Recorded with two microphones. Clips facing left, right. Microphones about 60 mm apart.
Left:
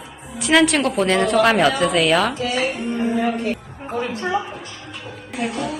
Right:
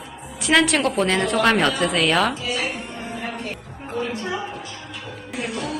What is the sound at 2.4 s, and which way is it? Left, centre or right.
Speech, left.